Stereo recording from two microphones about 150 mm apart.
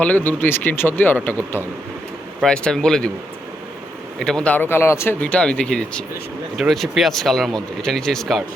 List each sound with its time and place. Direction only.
0.0 s speech: 10° left (ahead or behind)
4.2 s speech: 5° left (ahead or behind)